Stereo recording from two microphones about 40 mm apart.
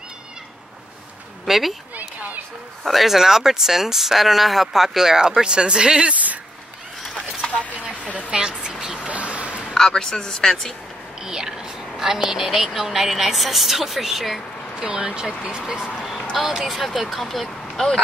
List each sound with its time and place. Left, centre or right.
1.4 s speech: centre
2.8 s speech: centre
3.2 s speech: centre
7.7 s a sound: right
8.3 s speech: right
9.0 s a sound: right
9.8 s speech: centre
11.2 s speech: centre
14.8 s speech: right
16.0 s a sound: centre
16.3 s a sound: centre
16.7 s speech: centre